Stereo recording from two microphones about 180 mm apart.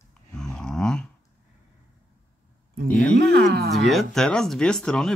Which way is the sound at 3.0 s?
60° right (ahead or behind).